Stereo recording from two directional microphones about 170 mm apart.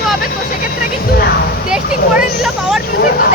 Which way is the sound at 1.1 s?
70° left (ahead or behind).